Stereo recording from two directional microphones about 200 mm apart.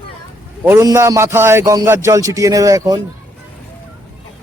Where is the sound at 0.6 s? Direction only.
15° right (ahead or behind).